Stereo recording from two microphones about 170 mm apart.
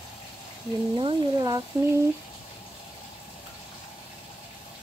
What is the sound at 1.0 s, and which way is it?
Speech, 25° right (ahead or behind).